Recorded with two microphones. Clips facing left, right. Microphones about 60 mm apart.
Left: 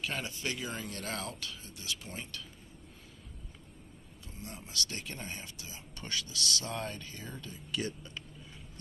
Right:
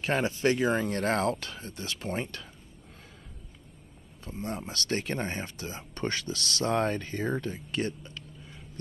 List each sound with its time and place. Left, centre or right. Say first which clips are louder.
0.0 s speech: right 11 dB; right
4.2 s speech: right 12 dB; right